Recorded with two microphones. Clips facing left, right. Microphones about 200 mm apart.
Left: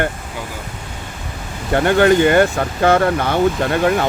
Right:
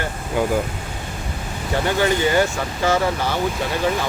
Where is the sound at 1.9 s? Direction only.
60° left (ahead or behind).